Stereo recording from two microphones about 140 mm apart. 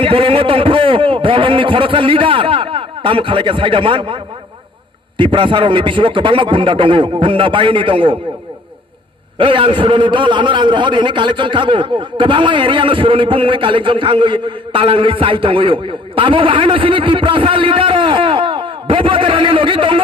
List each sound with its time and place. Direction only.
0.0 s a man's voice: 40° right (ahead or behind)
9.4 s a man's voice: 35° right (ahead or behind)